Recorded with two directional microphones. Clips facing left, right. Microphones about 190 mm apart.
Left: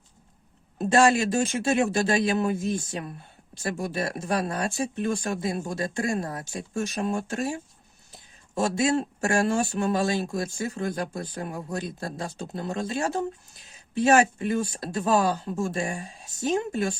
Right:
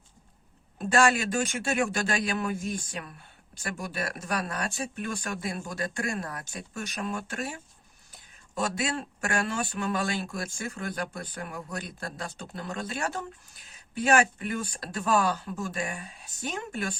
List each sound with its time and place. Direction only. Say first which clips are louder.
0.8 s speech: left 4 dB; 25° left (ahead or behind)